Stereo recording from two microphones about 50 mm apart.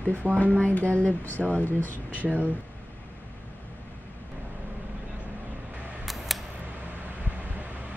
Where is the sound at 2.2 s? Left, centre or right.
Right.